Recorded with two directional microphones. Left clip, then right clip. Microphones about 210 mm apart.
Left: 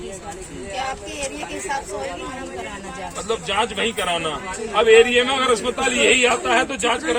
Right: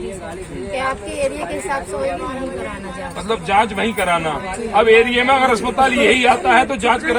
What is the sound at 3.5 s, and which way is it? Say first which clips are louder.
A man's voice: right 6 dB; 25° right (ahead or behind).